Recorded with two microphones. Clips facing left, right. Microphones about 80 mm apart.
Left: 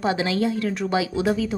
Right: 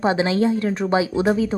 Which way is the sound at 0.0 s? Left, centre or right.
Right.